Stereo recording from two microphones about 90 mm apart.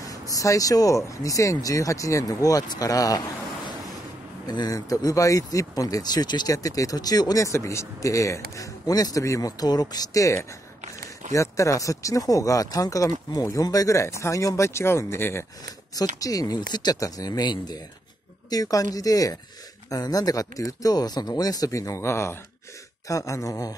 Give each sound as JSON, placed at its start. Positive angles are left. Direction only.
{"t": 0.0, "sound": "speech", "side_deg": 40}
{"t": 6.5, "sound": "speech", "side_deg": 40}
{"t": 15.6, "sound": "speech", "side_deg": 45}